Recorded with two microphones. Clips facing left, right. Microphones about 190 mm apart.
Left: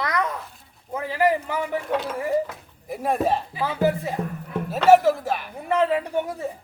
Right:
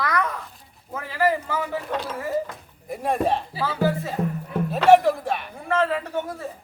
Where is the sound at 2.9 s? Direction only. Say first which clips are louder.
Even; centre (ahead or behind).